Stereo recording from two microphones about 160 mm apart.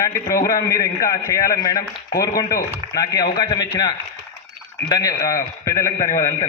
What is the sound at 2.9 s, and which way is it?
Speech, 25° left (ahead or behind).